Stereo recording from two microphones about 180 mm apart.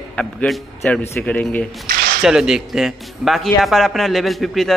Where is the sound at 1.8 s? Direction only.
55° right (ahead or behind).